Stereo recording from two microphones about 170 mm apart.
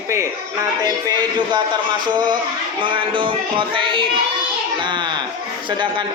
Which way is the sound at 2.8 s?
30° right (ahead or behind).